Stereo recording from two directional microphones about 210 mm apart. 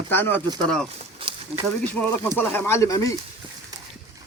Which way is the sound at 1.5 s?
25° right (ahead or behind).